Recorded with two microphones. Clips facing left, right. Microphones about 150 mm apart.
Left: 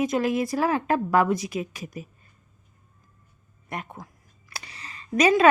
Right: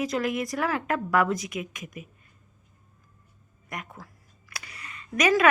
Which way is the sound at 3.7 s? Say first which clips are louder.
Left 4 dB; 30° left (ahead or behind).